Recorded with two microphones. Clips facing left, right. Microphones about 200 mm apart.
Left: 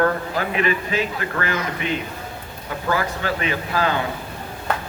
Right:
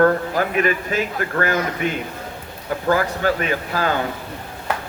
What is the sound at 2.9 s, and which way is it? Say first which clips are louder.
A man's voice: right 4 dB; 45° right (ahead or behind).